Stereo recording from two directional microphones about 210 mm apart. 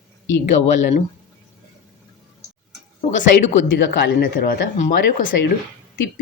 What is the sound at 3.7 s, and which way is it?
Speech, 50° left (ahead or behind).